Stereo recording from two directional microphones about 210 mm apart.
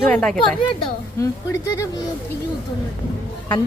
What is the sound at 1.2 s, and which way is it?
Speech, 15° left (ahead or behind).